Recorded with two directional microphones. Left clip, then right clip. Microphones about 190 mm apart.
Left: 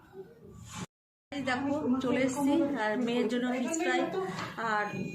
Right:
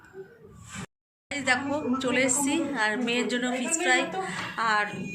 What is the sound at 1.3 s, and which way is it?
A woman's voice, 15° left (ahead or behind).